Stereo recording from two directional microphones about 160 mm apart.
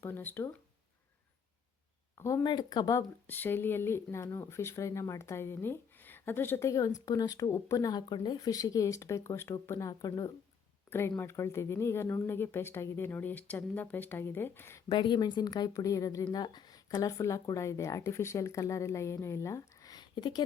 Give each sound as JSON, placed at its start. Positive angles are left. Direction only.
{"t": 0.0, "sound": "speech", "side_deg": 10}
{"t": 2.2, "sound": "speech", "side_deg": 25}
{"t": 14.8, "sound": "speech", "side_deg": 30}